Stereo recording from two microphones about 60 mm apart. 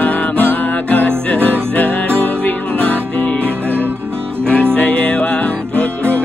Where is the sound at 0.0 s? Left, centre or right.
Left.